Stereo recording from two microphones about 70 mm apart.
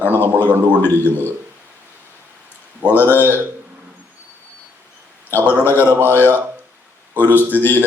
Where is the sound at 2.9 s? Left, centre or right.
Left.